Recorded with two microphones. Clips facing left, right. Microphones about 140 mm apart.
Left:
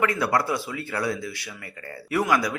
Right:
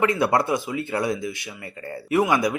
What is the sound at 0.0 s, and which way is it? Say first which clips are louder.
Speech: right 3 dB; 25° right (ahead or behind).